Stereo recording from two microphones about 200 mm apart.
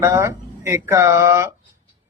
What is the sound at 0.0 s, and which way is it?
A man's voice, 15° right (ahead or behind).